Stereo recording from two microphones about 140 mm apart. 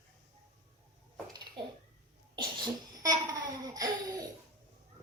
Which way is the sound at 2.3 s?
30° right (ahead or behind).